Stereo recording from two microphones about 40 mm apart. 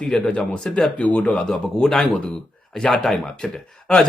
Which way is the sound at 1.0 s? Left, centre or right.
Left.